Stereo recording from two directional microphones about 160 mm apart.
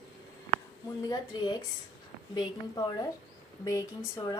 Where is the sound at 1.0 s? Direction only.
25° left (ahead or behind).